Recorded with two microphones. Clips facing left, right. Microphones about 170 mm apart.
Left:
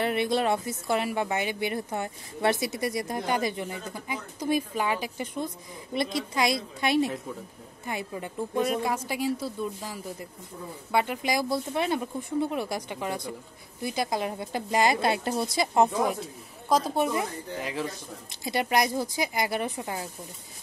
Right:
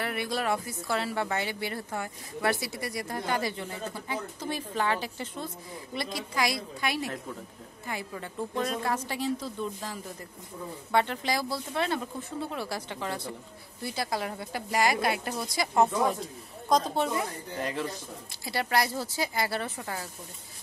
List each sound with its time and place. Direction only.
0.0 s a woman's voice: 25° left (ahead or behind)
16.6 s speech: 5° left (ahead or behind)
17.6 s speech: 5° left (ahead or behind)
18.3 s speech: 20° left (ahead or behind)